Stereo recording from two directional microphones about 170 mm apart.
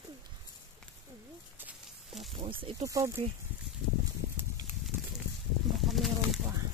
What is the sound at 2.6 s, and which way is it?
Speech, 20° right (ahead or behind).